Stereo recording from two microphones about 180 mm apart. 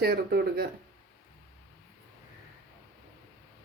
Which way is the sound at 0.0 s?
60° right (ahead or behind).